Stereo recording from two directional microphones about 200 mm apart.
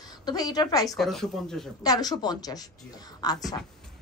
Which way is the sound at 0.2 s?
20° left (ahead or behind).